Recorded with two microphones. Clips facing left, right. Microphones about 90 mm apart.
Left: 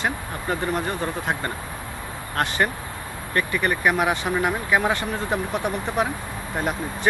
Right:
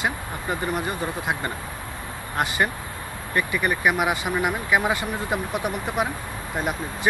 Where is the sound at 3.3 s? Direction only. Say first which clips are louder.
Left 1 dB; 5° right (ahead or behind).